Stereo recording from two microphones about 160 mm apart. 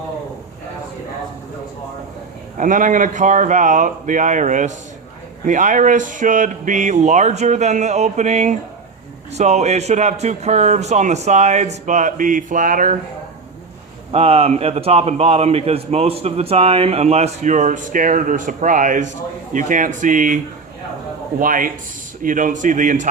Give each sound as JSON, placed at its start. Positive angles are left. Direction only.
{"t": 2.6, "sound": "a man's voice", "side_deg": -55}
{"t": 14.1, "sound": "a man's voice", "side_deg": -40}